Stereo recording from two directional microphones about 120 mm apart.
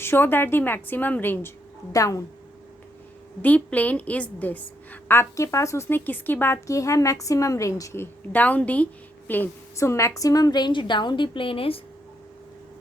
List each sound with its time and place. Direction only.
0.0 s a woman's voice: 20° left (ahead or behind)
3.4 s a woman's voice: 15° left (ahead or behind); by 11.8 s 50° left (ahead or behind)